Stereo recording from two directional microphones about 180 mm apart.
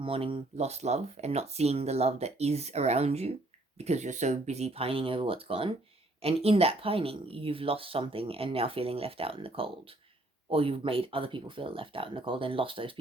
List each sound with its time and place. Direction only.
0.0 s speech: 30° right (ahead or behind)